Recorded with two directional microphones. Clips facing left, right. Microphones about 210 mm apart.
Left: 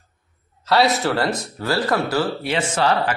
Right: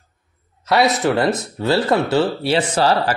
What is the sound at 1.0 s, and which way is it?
Speech, 20° right (ahead or behind).